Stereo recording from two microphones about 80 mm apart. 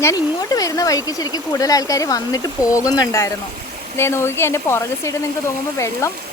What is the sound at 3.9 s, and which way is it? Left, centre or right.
Speech, left.